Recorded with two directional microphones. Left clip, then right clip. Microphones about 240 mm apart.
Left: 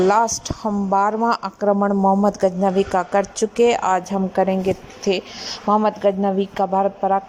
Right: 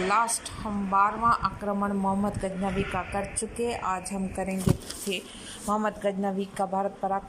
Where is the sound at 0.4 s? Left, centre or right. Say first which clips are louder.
Left 10 dB; left.